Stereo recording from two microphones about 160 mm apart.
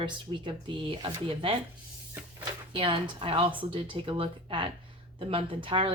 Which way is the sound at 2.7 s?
30° right (ahead or behind).